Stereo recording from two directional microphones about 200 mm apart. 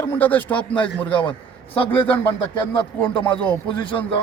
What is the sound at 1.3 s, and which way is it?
Speech, 25° left (ahead or behind).